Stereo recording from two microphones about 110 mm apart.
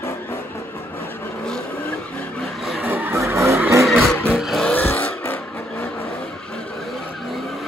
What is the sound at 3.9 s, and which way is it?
Music, centre (ahead or behind).